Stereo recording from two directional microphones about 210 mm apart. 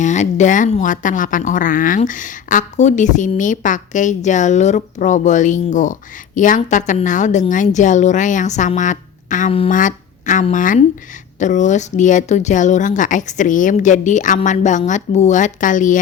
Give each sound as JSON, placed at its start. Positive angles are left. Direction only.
{"t": 0.0, "sound": "speech", "side_deg": 35}